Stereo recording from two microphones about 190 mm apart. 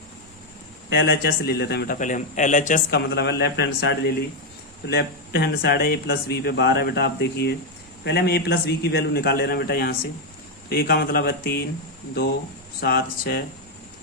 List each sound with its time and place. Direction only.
0.9 s speech: 60° left (ahead or behind)
2.0 s a man's voice: 40° left (ahead or behind)
2.9 s speech: 60° left (ahead or behind)
12.8 s speech: 55° left (ahead or behind)